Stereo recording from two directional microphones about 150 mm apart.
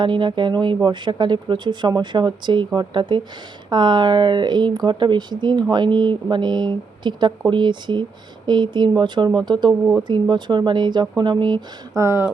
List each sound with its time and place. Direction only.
0.0 s speech: 30° right (ahead or behind)
12.0 s speech: 15° right (ahead or behind)